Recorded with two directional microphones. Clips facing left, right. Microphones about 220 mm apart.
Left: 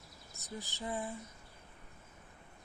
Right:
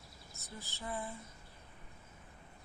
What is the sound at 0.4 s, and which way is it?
Speech, 15° left (ahead or behind).